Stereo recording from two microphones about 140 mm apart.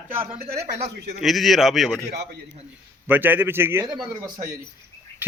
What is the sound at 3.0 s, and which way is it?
Speech, 15° right (ahead or behind).